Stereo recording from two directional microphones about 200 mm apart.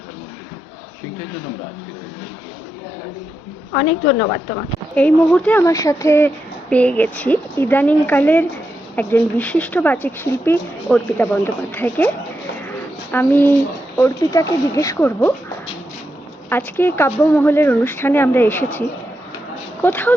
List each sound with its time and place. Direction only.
4.0 s a woman's voice: 25° left (ahead or behind)
4.9 s speech: 5° left (ahead or behind)
12.6 s a sound: 10° left (ahead or behind)
13.9 s speech: 15° left (ahead or behind)
16.5 s speech: 10° left (ahead or behind)